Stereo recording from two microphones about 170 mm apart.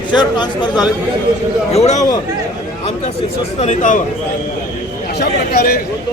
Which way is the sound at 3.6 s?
45° left (ahead or behind).